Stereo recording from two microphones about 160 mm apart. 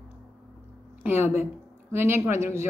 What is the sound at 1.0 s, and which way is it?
A woman's voice, 15° right (ahead or behind).